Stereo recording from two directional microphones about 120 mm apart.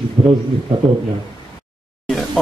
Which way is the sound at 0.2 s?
50° right (ahead or behind).